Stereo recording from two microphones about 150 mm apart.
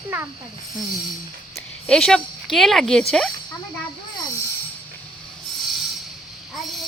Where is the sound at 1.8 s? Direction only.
5° left (ahead or behind).